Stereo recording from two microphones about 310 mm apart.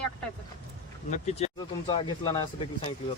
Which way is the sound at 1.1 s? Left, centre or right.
Left.